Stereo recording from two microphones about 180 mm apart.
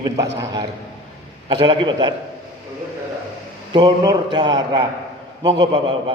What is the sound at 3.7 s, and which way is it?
A man's voice, 20° right (ahead or behind).